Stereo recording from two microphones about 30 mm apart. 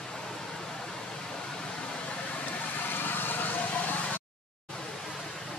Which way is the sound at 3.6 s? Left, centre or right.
Left.